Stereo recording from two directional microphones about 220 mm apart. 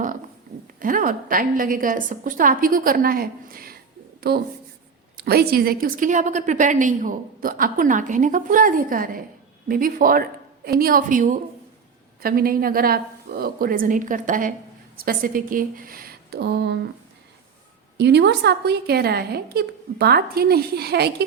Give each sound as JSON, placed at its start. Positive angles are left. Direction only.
{"t": 0.8, "sound": "a woman's voice", "side_deg": -40}
{"t": 17.9, "sound": "a woman's voice", "side_deg": -50}